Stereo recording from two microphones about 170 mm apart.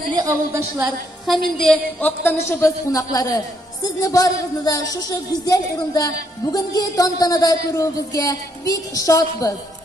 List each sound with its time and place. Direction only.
0.1 s a woman's voice: 20° right (ahead or behind)
1.2 s speech: centre (ahead or behind); by 9.5 s 20° left (ahead or behind)